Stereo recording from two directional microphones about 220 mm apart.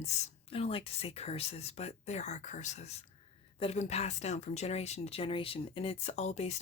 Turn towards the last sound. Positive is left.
turn(degrees=30)  # may be behind; listen again after turning